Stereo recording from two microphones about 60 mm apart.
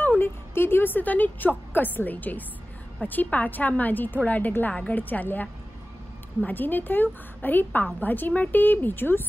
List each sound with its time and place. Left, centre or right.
0.2 s a woman's voice: left